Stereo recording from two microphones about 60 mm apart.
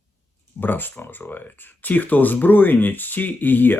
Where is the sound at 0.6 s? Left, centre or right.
Left.